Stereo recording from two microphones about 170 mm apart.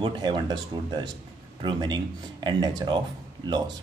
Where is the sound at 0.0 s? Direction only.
25° right (ahead or behind).